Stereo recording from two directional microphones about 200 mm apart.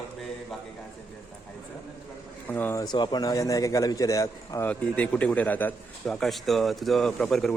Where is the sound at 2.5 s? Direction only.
10° left (ahead or behind).